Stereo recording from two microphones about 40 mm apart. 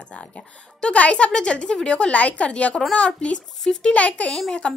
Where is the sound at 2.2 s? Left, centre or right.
Left.